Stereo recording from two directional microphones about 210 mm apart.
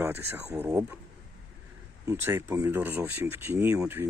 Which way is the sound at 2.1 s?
10° right (ahead or behind).